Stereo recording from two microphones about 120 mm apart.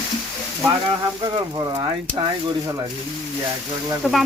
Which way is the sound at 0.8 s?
40° right (ahead or behind).